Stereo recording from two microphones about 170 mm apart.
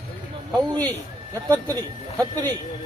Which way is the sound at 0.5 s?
25° right (ahead or behind).